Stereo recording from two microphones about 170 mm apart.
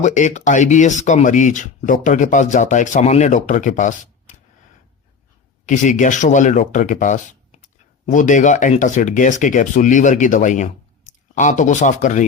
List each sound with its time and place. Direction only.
0.0 s speech: 45° left (ahead or behind)
5.6 s speech: 50° left (ahead or behind)